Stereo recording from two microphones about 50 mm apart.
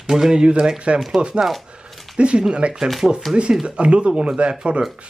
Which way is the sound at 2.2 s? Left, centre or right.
Centre.